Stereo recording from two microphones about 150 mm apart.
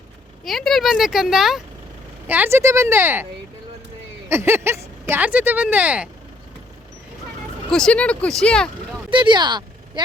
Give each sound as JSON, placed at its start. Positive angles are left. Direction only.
{"t": 0.4, "sound": "speech", "side_deg": 0}
{"t": 2.2, "sound": "speech", "side_deg": -10}
{"t": 4.3, "sound": "speech", "side_deg": -15}
{"t": 7.7, "sound": "speech", "side_deg": 5}
{"t": 9.0, "sound": "speech", "side_deg": -35}